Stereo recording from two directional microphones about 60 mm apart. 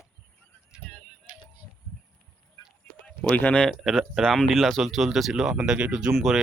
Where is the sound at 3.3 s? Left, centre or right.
Left.